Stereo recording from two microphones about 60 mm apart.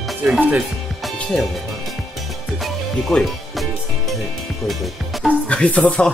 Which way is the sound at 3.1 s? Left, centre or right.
Centre.